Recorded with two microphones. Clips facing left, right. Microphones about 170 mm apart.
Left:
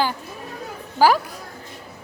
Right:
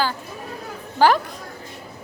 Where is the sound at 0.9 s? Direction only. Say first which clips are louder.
Even; 5° left (ahead or behind).